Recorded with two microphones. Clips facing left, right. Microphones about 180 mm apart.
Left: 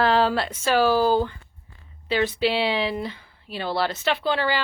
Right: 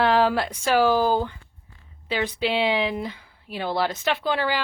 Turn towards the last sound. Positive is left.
turn(degrees=-10)  # may be behind; listen again after turning